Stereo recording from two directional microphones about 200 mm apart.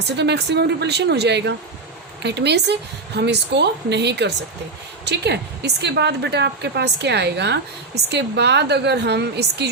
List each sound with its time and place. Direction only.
0.0 s a woman's voice: 55° right (ahead or behind)